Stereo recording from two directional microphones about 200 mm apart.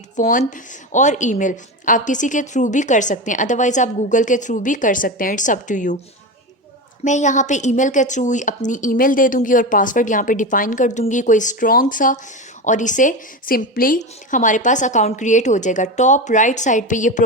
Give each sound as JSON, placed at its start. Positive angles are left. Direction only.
{"t": 0.2, "sound": "a woman's voice", "side_deg": 40}
{"t": 7.0, "sound": "a woman's voice", "side_deg": 35}